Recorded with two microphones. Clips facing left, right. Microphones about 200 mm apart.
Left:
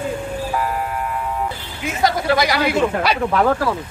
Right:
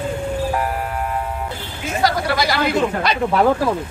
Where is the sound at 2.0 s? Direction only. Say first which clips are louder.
Left 2 dB; 20° left (ahead or behind).